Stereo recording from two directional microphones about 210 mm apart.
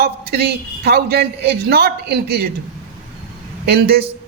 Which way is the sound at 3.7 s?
50° right (ahead or behind).